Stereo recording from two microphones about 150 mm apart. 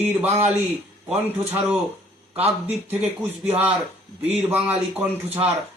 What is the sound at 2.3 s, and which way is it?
Speech, 45° right (ahead or behind).